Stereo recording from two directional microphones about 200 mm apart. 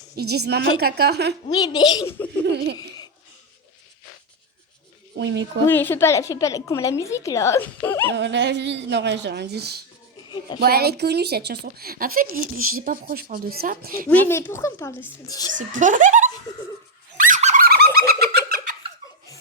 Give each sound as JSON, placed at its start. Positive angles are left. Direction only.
{"t": 0.2, "sound": "a woman's voice", "side_deg": -55}
{"t": 1.5, "sound": "speech", "side_deg": 20}
{"t": 5.1, "sound": "speech", "side_deg": -60}
{"t": 5.6, "sound": "a woman's voice", "side_deg": 10}
{"t": 8.1, "sound": "a woman's voice", "side_deg": -60}
{"t": 14.1, "sound": "a woman's voice", "side_deg": 10}
{"t": 15.5, "sound": "speech", "side_deg": -40}
{"t": 17.2, "sound": "bird", "side_deg": -40}